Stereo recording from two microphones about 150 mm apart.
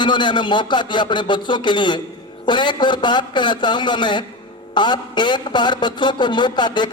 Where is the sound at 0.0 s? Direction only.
30° left (ahead or behind).